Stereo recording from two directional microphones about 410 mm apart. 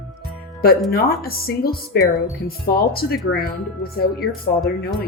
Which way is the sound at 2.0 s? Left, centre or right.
Centre.